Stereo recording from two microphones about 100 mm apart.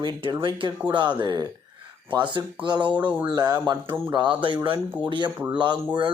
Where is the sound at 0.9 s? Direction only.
50° right (ahead or behind).